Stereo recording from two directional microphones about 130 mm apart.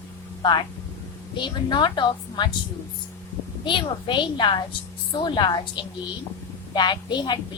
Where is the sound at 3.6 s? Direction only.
35° left (ahead or behind).